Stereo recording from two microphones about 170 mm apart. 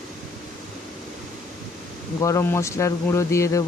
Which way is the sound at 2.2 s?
20° left (ahead or behind).